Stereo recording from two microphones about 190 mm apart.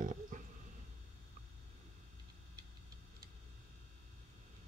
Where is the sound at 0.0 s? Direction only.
45° right (ahead or behind).